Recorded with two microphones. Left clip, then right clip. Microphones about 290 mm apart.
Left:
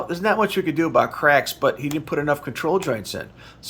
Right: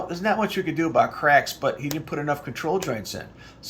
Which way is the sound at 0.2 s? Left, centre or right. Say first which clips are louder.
Left 4 dB; centre.